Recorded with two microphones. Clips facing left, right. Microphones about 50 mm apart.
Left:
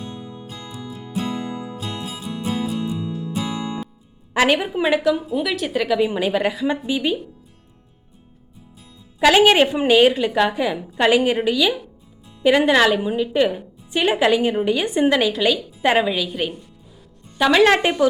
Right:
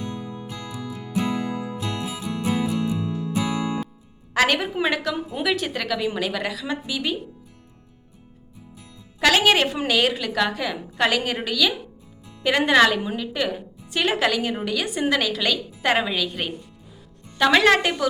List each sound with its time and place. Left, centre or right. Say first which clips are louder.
0.0 s music: right 2 dB; right
4.4 s a woman's voice: left 3 dB; centre
6.1 s a woman's voice: left 5 dB; left
9.2 s a woman's voice: left 4 dB; centre
13.0 s a woman's voice: left 7 dB; centre
14.6 s a woman's voice: left 6 dB; left
15.4 s a woman's voice: left 5 dB; centre
17.8 s a woman's voice: left 6 dB; centre